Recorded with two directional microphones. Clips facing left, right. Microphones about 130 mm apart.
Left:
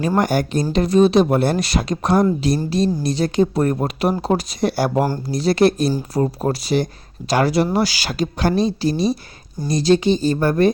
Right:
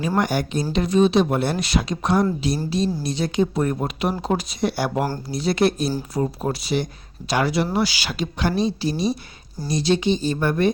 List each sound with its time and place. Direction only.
0.2 s speech: 45° left (ahead or behind)